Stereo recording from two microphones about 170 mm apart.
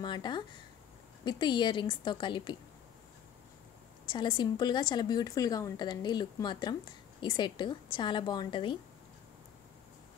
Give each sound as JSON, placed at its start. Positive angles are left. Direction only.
{"t": 0.0, "sound": "a woman's voice", "side_deg": 25}
{"t": 4.1, "sound": "a woman's voice", "side_deg": 30}